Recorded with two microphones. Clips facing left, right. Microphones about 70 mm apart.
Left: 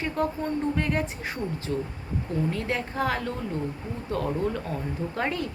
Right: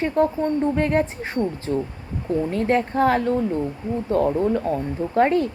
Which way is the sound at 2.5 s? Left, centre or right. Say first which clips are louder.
Right 8 dB; right.